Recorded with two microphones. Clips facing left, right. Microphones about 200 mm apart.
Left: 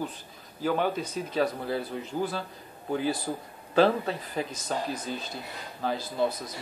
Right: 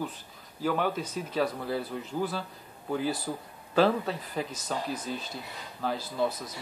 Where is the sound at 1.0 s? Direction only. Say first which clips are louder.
Left 2 dB; 5° right (ahead or behind).